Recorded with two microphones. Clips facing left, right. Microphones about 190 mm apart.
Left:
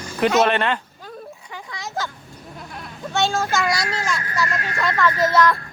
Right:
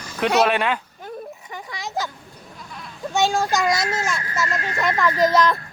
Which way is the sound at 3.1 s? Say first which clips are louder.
Right 1 dB; 15° right (ahead or behind).